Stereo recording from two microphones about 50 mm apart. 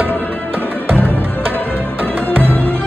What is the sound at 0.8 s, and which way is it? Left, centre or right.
Music, right.